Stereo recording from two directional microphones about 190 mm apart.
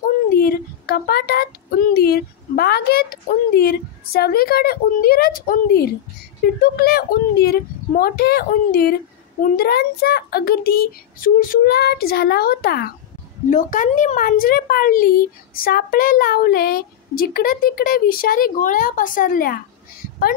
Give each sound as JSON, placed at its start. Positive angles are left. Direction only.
{"t": 0.3, "sound": "a woman's voice", "side_deg": 50}
{"t": 13.5, "sound": "a woman's voice", "side_deg": 40}